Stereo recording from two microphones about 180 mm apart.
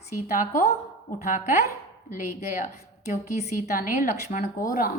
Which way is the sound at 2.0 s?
50° left (ahead or behind).